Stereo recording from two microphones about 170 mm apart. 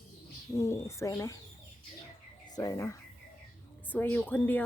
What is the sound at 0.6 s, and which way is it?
Speech, 15° left (ahead or behind).